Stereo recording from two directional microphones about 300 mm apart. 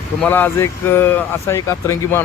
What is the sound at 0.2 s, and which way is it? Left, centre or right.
Speech, centre.